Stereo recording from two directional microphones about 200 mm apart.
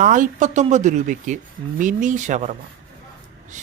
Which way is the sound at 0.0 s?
40° right (ahead or behind).